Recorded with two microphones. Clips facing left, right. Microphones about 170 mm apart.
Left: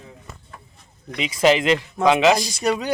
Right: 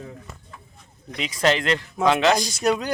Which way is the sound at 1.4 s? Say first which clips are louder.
Left 4 dB; 5° left (ahead or behind).